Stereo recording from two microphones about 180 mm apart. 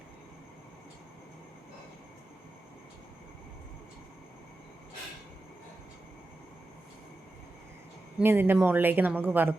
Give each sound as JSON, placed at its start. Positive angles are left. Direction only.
{"t": 8.2, "sound": "speech", "side_deg": -10}